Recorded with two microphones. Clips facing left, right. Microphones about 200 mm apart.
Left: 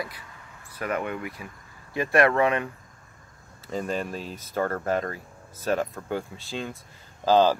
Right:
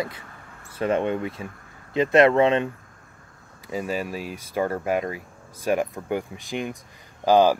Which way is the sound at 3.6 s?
10° right (ahead or behind).